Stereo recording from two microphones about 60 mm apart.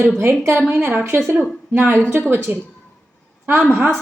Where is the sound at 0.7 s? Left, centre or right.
Right.